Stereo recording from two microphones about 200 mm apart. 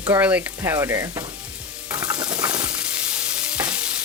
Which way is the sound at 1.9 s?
15° right (ahead or behind).